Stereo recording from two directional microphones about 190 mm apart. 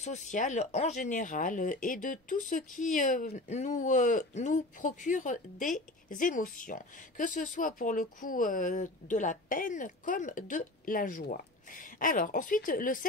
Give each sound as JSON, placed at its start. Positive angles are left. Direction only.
{"t": 0.0, "sound": "speech", "side_deg": 40}